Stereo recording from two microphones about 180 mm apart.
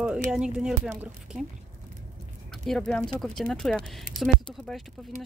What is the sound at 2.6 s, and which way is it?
Speech, 5° left (ahead or behind).